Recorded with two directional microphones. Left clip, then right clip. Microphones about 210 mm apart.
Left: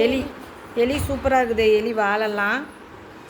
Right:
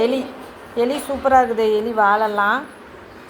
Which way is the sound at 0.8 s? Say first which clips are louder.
Right 1 dB; 10° left (ahead or behind).